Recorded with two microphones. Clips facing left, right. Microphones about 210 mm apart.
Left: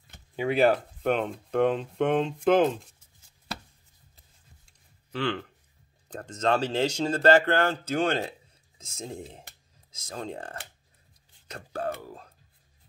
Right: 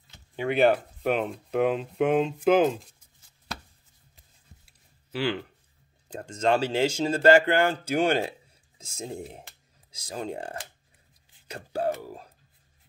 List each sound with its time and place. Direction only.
0.4 s speech: centre (ahead or behind)
6.0 s speech: 10° right (ahead or behind)
8.7 s a sound: 30° right (ahead or behind)
9.0 s speech: 10° right (ahead or behind)